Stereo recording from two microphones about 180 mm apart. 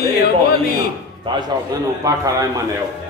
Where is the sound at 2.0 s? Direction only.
20° right (ahead or behind).